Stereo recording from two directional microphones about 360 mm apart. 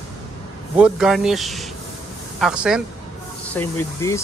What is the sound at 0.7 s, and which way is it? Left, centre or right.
Speech, centre.